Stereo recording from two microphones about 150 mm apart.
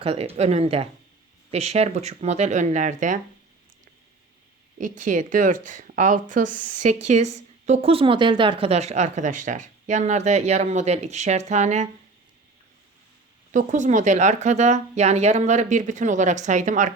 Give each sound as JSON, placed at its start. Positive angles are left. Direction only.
{"t": 0.0, "sound": "a woman's voice", "side_deg": -40}
{"t": 4.8, "sound": "speech", "side_deg": -60}
{"t": 13.5, "sound": "speech", "side_deg": -55}